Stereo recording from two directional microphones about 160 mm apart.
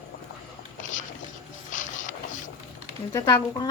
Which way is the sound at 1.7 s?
55° left (ahead or behind).